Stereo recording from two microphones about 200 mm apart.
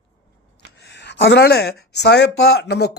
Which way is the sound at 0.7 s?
60° left (ahead or behind).